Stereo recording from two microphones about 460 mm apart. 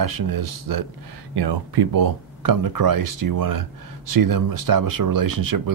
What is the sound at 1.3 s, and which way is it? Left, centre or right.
Speech, right.